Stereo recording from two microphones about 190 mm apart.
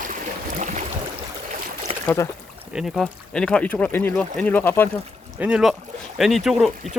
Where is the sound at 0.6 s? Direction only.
40° right (ahead or behind).